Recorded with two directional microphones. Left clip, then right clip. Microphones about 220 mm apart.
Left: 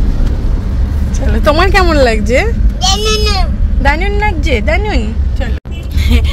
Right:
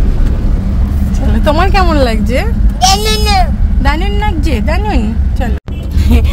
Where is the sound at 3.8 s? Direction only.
10° left (ahead or behind).